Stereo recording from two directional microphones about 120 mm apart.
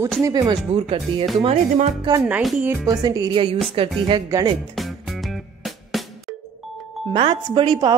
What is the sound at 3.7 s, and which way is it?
Speech, 50° right (ahead or behind).